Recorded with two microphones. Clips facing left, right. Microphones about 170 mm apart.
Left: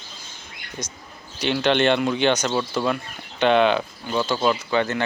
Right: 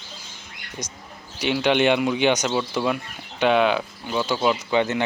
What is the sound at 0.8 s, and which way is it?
Speech, 15° right (ahead or behind).